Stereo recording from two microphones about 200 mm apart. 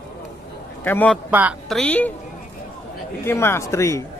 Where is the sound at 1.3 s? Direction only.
5° right (ahead or behind).